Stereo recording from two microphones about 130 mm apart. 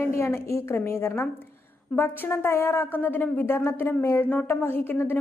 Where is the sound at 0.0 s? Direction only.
20° left (ahead or behind).